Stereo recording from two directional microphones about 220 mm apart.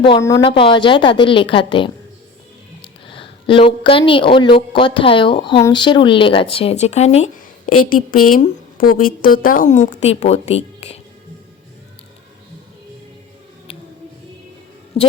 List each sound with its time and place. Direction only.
0.0 s a woman's voice: 15° left (ahead or behind)
8.3 s a woman's voice: 40° left (ahead or behind)
14.9 s a woman's voice: 25° left (ahead or behind)